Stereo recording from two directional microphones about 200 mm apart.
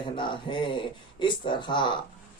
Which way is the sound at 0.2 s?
25° left (ahead or behind).